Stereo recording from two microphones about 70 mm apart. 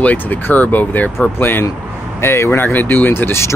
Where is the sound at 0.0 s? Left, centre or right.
Left.